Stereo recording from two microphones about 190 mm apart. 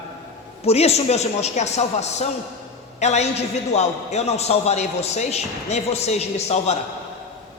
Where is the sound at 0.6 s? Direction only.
35° left (ahead or behind).